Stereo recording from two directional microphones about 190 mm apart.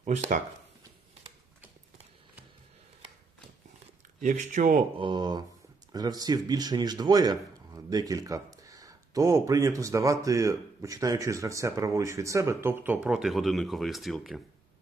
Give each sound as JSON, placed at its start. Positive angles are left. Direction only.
{"t": 0.0, "sound": "speech", "side_deg": -40}
{"t": 4.2, "sound": "speech", "side_deg": -40}
{"t": 4.9, "sound": "speech", "side_deg": -25}